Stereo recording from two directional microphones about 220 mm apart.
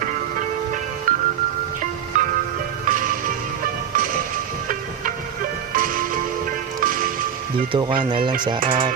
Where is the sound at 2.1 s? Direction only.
35° right (ahead or behind).